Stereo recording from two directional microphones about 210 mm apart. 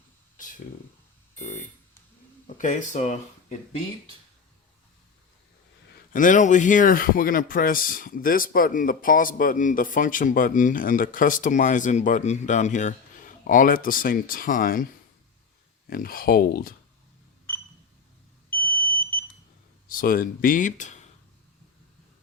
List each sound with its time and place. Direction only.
0.3 s a sound: 40° left (ahead or behind)
2.6 s speech: 35° left (ahead or behind)
6.1 s speech: 40° left (ahead or behind)
15.9 s speech: 45° left (ahead or behind)
19.9 s speech: 40° left (ahead or behind)